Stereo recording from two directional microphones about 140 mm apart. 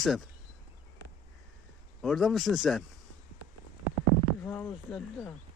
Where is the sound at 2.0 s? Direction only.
Centre (ahead or behind).